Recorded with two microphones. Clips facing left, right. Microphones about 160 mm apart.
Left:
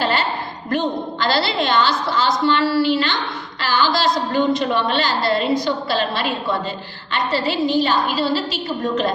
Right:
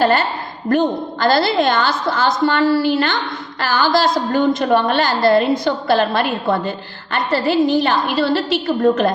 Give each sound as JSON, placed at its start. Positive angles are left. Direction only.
{"t": 0.0, "sound": "a woman's voice", "side_deg": -45}